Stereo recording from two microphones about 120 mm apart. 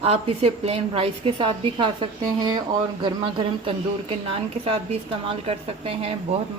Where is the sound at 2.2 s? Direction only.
35° right (ahead or behind); by 6.4 s 55° right (ahead or behind).